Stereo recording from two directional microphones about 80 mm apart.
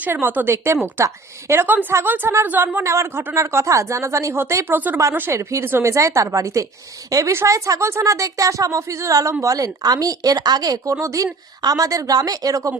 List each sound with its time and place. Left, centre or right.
0.0 s a woman's voice: right
1.6 s a woman's voice: right
11.0 s speech: right